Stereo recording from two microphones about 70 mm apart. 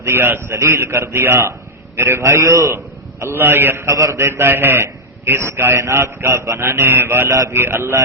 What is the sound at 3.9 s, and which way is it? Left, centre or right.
A man's voice, right.